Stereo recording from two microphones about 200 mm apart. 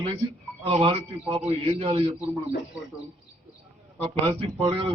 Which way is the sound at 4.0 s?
30° right (ahead or behind).